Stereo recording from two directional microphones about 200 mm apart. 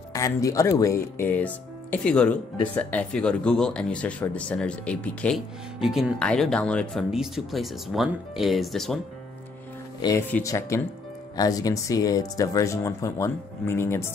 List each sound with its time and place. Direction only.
0.1 s speech: 15° left (ahead or behind)
10.0 s speech: 15° left (ahead or behind)